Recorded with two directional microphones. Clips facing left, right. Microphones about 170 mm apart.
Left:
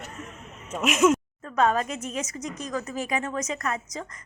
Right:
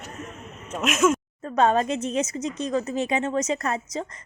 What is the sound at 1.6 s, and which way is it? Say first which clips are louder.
A woman's voice: right 3 dB; 30° right (ahead or behind).